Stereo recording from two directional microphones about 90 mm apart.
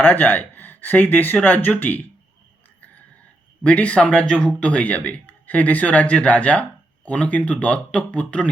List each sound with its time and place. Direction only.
0.0 s speech: 20° left (ahead or behind)
3.6 s speech: 15° left (ahead or behind)